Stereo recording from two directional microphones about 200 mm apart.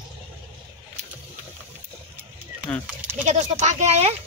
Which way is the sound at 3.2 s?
35° right (ahead or behind).